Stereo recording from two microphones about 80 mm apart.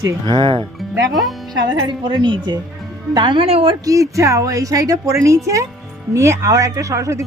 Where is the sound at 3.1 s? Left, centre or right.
Right.